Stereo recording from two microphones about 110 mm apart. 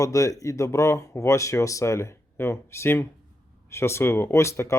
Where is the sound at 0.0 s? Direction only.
30° left (ahead or behind).